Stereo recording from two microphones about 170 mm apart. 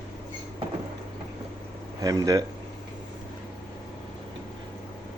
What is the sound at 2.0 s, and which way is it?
Speech, 20° right (ahead or behind).